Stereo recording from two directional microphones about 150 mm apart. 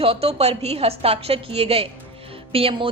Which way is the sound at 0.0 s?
40° right (ahead or behind).